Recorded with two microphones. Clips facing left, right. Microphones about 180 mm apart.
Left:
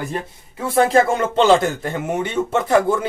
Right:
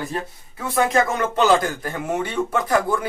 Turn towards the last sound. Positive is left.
turn(degrees=25)  # may be behind; listen again after turning